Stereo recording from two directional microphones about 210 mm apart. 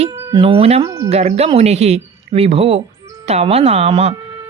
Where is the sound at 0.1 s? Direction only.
15° right (ahead or behind).